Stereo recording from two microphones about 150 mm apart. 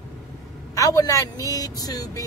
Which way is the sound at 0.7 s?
25° left (ahead or behind).